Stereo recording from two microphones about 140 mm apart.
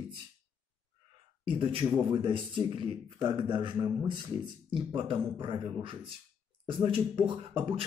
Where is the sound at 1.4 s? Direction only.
40° right (ahead or behind).